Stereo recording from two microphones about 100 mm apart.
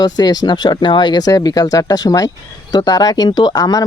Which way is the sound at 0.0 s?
40° left (ahead or behind).